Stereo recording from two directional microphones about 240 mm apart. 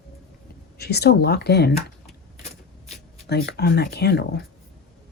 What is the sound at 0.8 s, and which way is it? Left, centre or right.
Speech, left.